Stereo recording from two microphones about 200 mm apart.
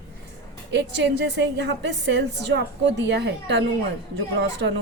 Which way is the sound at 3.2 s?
60° right (ahead or behind).